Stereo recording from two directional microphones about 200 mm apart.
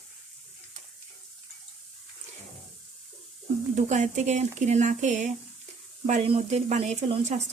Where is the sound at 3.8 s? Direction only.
35° right (ahead or behind).